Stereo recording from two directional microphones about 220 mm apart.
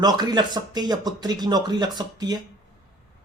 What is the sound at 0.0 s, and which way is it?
Speech, 20° right (ahead or behind).